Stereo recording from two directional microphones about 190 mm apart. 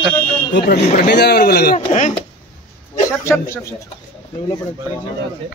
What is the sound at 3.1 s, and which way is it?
Speech, 15° left (ahead or behind).